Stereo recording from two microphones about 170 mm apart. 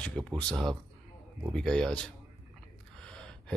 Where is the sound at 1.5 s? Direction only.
5° left (ahead or behind).